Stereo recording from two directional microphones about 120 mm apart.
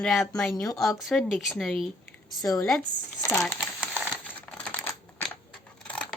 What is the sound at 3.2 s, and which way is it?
Speech, 25° left (ahead or behind).